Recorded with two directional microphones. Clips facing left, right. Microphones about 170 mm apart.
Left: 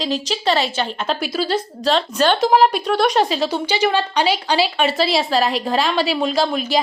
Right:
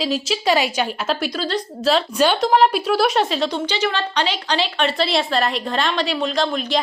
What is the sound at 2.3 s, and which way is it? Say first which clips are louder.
Speech: left 1 dB; centre (ahead or behind).